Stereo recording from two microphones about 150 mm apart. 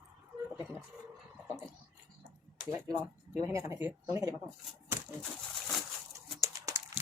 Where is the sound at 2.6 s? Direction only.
30° right (ahead or behind).